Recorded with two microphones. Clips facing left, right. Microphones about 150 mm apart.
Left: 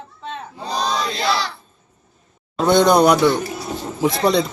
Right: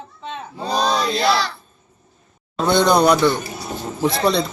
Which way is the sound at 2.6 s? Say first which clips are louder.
Left 2 dB; 15° left (ahead or behind).